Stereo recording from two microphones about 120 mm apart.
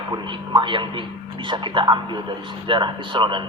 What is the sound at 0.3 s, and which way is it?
A man's voice, 40° right (ahead or behind).